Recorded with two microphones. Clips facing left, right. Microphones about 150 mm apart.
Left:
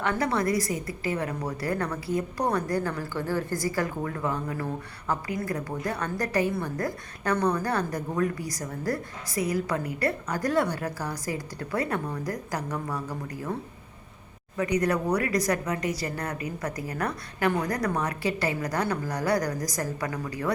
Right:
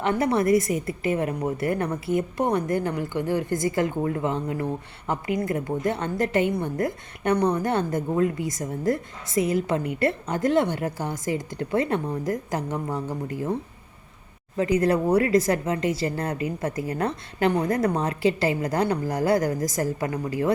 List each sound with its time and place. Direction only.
0.0 s a woman's voice: 20° right (ahead or behind)